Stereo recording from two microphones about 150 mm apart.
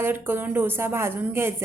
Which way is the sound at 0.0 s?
15° right (ahead or behind).